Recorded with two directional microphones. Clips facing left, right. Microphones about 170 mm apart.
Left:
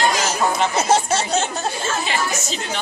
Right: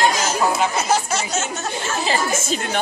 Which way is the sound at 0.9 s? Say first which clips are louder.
Left 3 dB; 30° left (ahead or behind).